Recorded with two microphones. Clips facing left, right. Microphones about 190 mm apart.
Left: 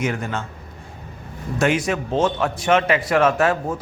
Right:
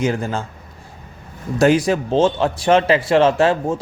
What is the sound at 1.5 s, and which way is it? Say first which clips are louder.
A man's voice: right 5 dB; 35° right (ahead or behind).